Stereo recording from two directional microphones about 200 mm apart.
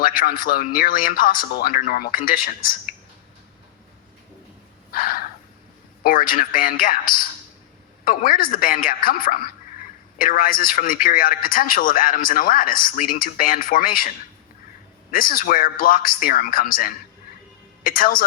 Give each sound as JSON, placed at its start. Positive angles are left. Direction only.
{"t": 0.0, "sound": "a man's voice", "side_deg": 45}
{"t": 4.9, "sound": "a sound", "side_deg": 45}
{"t": 6.0, "sound": "a man's voice", "side_deg": 45}
{"t": 15.1, "sound": "a man's voice", "side_deg": 45}